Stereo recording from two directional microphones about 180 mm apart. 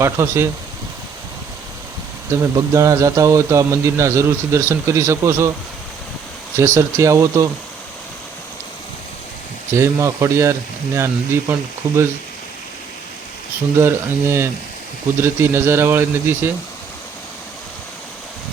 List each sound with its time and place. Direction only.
0.0 s a man's voice: 15° right (ahead or behind)
2.3 s a man's voice: 15° right (ahead or behind)
6.6 s a man's voice: 15° right (ahead or behind)
9.7 s a man's voice: 15° right (ahead or behind)
13.7 s a man's voice: 15° right (ahead or behind)